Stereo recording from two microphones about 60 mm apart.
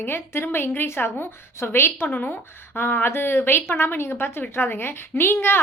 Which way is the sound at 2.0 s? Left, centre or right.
Left.